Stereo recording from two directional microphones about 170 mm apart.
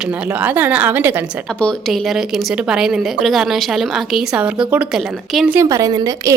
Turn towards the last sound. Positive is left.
turn(degrees=-20)  # may be behind; listen again after turning